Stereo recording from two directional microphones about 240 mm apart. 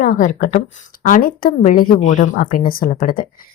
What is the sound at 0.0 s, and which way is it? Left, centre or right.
Speech, left.